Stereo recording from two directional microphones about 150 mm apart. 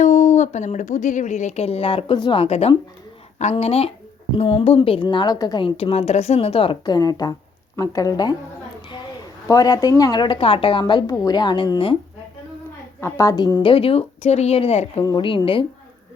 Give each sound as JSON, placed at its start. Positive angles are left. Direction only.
{"t": 0.0, "sound": "speech", "side_deg": 55}
{"t": 2.4, "sound": "a woman's voice", "side_deg": 45}
{"t": 9.5, "sound": "a woman's voice", "side_deg": 25}
{"t": 13.0, "sound": "a woman's voice", "side_deg": 20}
{"t": 15.0, "sound": "a woman's voice", "side_deg": 30}